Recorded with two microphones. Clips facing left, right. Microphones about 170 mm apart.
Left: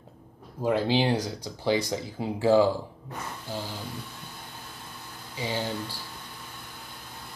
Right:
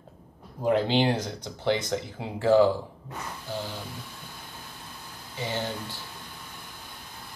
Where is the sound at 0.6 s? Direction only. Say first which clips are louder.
Right 1 dB; 5° left (ahead or behind).